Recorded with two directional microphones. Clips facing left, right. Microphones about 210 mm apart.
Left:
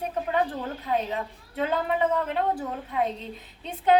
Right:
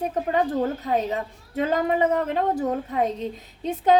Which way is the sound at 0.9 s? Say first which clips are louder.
Right 3 dB; 45° right (ahead or behind).